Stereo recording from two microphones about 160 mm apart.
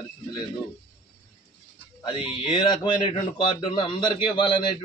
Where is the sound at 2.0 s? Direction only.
30° left (ahead or behind).